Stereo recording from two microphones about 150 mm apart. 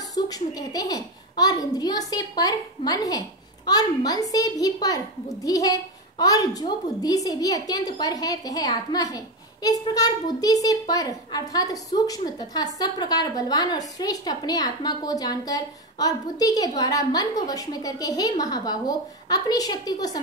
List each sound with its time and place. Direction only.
0.1 s a child's voice: 25° left (ahead or behind)